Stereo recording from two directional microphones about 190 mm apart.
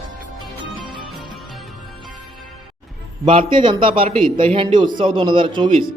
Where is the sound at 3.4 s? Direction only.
25° right (ahead or behind).